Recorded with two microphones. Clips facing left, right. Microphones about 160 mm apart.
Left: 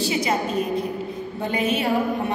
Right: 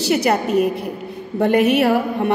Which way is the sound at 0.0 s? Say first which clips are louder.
Right 5 dB; 70° right (ahead or behind).